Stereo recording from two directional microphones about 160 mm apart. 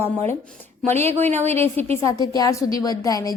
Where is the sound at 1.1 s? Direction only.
45° right (ahead or behind).